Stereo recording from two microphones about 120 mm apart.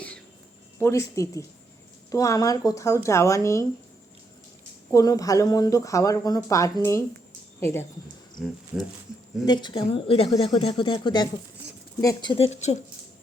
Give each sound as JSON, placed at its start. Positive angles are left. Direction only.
{"t": 0.8, "sound": "speech", "side_deg": 25}
{"t": 4.9, "sound": "speech", "side_deg": 30}
{"t": 8.4, "sound": "speech", "side_deg": -5}
{"t": 9.5, "sound": "a woman's voice", "side_deg": 40}
{"t": 12.4, "sound": "speech", "side_deg": 70}